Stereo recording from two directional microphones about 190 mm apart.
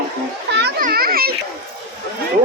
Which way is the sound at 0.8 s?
50° right (ahead or behind).